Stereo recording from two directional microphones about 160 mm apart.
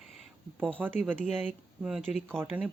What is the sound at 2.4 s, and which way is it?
Speech, 10° right (ahead or behind).